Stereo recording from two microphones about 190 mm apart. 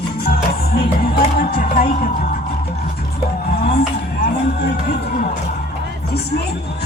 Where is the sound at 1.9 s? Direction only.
45° left (ahead or behind).